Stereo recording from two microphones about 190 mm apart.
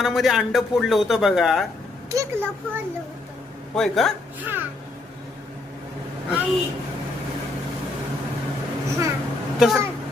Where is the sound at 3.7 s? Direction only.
Centre (ahead or behind).